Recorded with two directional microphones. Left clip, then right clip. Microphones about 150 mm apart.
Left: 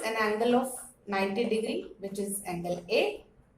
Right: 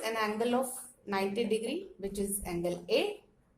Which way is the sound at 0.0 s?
75° right (ahead or behind).